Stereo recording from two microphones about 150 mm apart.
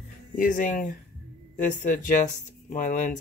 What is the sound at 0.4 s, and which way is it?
Speech, 60° left (ahead or behind).